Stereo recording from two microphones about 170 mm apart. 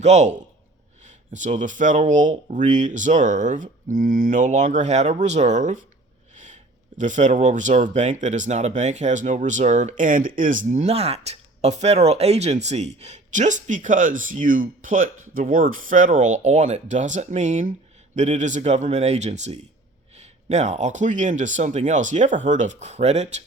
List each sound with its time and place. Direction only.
0.0 s a man's voice: 40° right (ahead or behind)